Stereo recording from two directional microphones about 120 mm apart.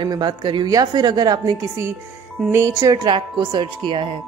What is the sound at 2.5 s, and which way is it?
Speech, 25° right (ahead or behind).